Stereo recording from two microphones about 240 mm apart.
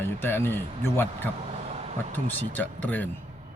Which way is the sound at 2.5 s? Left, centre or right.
Centre.